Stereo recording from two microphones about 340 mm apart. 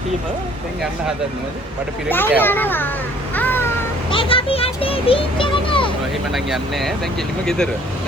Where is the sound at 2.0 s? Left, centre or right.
Centre.